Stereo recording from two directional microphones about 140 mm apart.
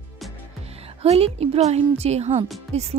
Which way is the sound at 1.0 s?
45° right (ahead or behind).